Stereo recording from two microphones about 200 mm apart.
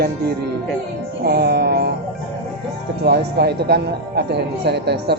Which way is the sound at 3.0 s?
55° right (ahead or behind).